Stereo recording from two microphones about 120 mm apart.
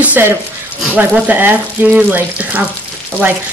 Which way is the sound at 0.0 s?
15° right (ahead or behind).